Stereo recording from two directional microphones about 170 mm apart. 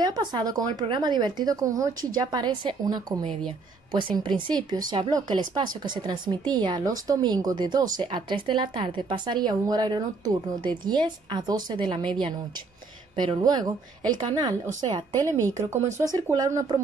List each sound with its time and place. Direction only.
0.0 s speech: 25° right (ahead or behind)
4.5 s speech: 25° right (ahead or behind)